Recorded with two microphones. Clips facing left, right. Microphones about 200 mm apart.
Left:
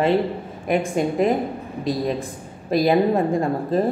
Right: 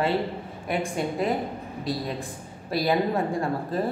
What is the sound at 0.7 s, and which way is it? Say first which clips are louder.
A woman's voice: left 7 dB; 20° left (ahead or behind).